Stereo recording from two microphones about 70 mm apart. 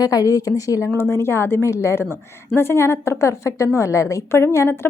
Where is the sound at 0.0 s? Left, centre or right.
Left.